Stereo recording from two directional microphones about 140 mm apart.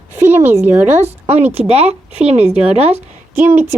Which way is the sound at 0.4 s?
15° right (ahead or behind).